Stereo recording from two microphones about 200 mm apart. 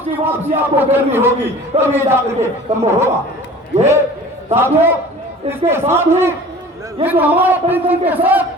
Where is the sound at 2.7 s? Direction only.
30° right (ahead or behind).